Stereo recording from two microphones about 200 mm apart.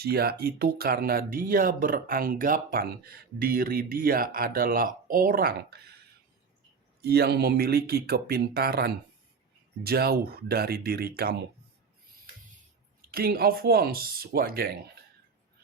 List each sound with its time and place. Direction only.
0.0 s speech: 50° right (ahead or behind)
7.0 s speech: 50° right (ahead or behind)
13.1 s speech: 50° right (ahead or behind)